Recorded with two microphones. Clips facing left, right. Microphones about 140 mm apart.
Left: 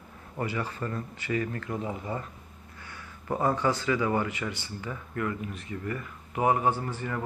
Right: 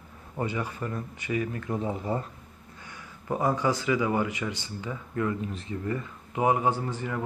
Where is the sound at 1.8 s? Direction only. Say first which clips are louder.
Right 4 dB; 30° right (ahead or behind).